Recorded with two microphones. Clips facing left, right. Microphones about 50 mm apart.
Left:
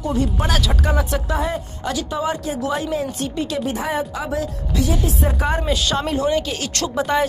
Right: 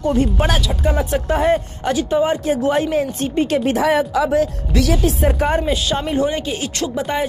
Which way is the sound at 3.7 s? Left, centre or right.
Right.